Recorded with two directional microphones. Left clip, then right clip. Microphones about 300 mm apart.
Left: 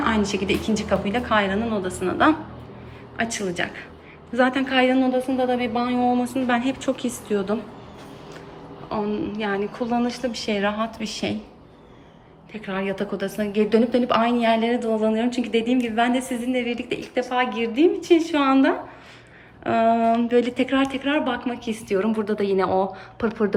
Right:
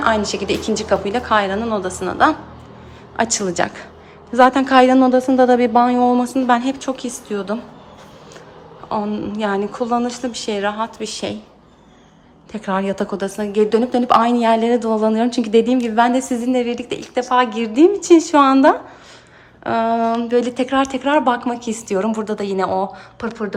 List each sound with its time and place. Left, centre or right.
0.0 s speech: centre
5.5 s speech: right
6.2 s speech: centre
8.9 s speech: centre
12.5 s speech: centre